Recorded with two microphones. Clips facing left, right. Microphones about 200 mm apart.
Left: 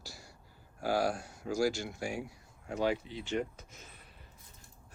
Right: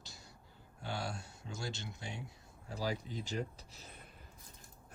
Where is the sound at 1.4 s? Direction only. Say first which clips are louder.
Left 15 dB; 25° right (ahead or behind).